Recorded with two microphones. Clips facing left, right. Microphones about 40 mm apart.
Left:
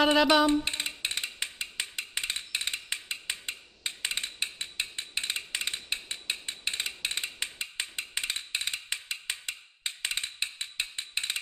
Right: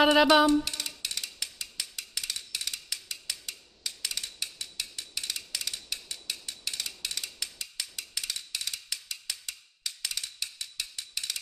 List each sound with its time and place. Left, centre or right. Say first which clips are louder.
0.7 s mechanisms: left 4 dB; left